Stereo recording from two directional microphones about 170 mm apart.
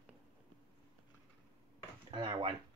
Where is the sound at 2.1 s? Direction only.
30° right (ahead or behind).